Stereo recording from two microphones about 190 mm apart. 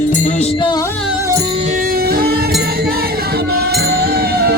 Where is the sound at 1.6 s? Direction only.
45° right (ahead or behind).